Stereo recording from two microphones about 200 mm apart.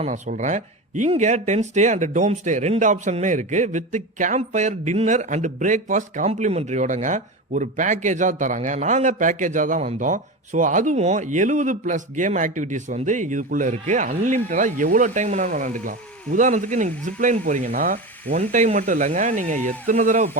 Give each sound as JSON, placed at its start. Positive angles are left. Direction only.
{"t": 0.0, "sound": "speech", "side_deg": -40}